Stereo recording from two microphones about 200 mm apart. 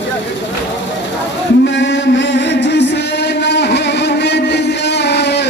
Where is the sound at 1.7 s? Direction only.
65° left (ahead or behind).